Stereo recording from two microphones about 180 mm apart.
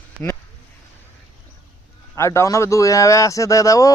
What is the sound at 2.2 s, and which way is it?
A man's voice, 15° left (ahead or behind).